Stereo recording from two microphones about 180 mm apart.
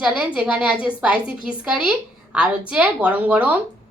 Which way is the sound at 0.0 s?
5° right (ahead or behind).